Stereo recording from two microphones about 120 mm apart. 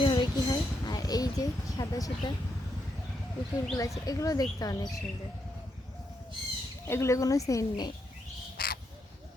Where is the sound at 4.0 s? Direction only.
30° left (ahead or behind).